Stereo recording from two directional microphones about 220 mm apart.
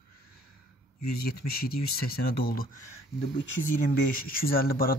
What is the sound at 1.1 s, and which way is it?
Speech, 45° left (ahead or behind).